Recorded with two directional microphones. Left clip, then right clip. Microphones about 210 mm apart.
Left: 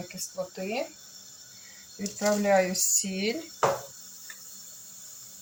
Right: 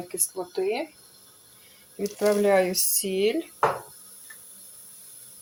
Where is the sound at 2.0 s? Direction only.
45° right (ahead or behind).